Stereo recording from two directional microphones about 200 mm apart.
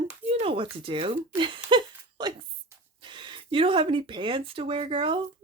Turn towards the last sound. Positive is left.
turn(degrees=-25)  # may be behind; listen again after turning